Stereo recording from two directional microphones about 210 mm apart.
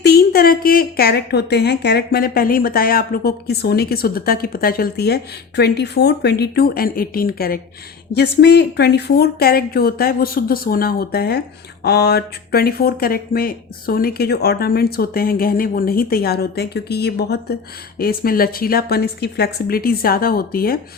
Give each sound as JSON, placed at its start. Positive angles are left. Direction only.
{"t": 0.0, "sound": "speech", "side_deg": 50}